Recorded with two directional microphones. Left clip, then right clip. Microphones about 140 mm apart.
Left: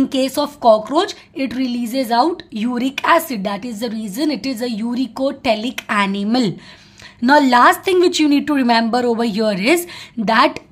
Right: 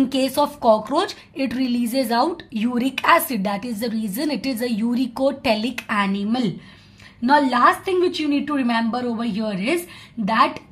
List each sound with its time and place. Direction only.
0.0 s a woman's voice: 20° left (ahead or behind); by 10.6 s 40° left (ahead or behind)